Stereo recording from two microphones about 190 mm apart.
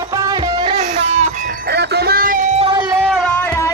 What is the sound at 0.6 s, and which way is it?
Music, 35° right (ahead or behind).